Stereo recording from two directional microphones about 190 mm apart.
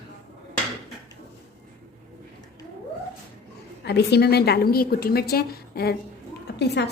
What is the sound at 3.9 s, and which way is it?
A woman's voice, 60° left (ahead or behind).